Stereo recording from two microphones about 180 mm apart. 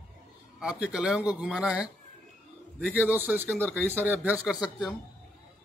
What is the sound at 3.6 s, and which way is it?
Speech, 10° left (ahead or behind).